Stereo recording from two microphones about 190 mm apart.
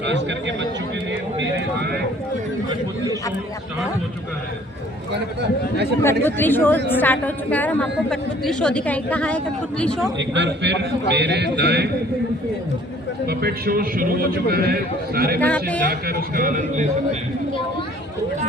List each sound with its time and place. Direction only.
0.0 s speech: 70° right (ahead or behind)
2.6 s a man's voice: 20° right (ahead or behind)
5.1 s speech: 60° right (ahead or behind)
6.2 s a woman's voice: 10° left (ahead or behind)
10.2 s a man's voice: 70° right (ahead or behind)
13.2 s a man's voice: 55° right (ahead or behind)
15.4 s a woman's voice: 5° left (ahead or behind)
15.9 s a man's voice: 55° right (ahead or behind)